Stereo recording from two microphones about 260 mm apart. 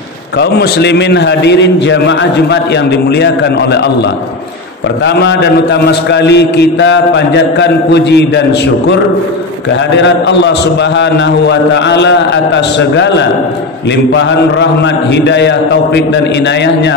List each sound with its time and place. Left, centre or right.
0.4 s a man's voice: left
5.0 s a man's voice: left
9.9 s a man's voice: left
14.1 s a man's voice: left